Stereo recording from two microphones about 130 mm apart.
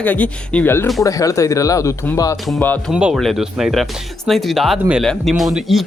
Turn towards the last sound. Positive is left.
turn(degrees=0)  # may be behind; listen again after turning